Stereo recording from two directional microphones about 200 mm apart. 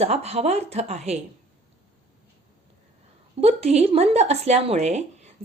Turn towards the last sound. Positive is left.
turn(degrees=-35)  # may be behind; listen again after turning